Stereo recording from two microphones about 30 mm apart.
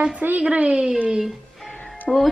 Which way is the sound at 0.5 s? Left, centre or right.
Right.